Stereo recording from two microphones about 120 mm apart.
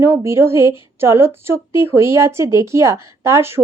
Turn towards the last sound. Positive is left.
turn(degrees=-20)  # may be behind; listen again after turning